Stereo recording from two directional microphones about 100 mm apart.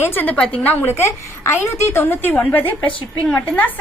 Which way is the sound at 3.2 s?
15° left (ahead or behind).